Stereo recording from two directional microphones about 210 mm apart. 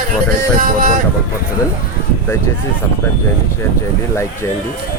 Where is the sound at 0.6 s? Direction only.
40° right (ahead or behind).